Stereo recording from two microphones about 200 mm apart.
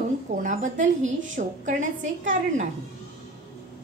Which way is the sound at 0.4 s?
40° right (ahead or behind).